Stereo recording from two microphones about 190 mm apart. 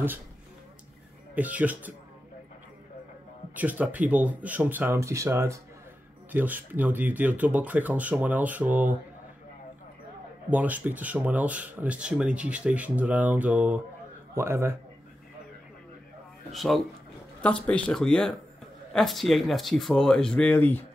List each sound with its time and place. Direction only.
1.3 s speech: 10° right (ahead or behind)
3.5 s speech: 10° right (ahead or behind)
10.5 s speech: 10° right (ahead or behind)
16.5 s speech: centre (ahead or behind)